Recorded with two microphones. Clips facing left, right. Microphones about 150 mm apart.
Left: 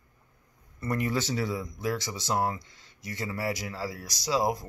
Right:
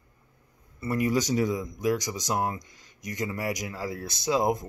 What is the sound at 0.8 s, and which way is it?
Speech, 10° right (ahead or behind).